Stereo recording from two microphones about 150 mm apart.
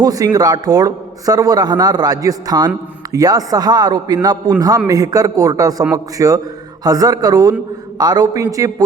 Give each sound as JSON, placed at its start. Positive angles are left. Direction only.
{"t": 0.0, "sound": "a man's voice", "side_deg": -25}